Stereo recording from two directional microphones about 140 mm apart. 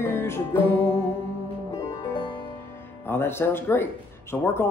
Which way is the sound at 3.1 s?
15° left (ahead or behind).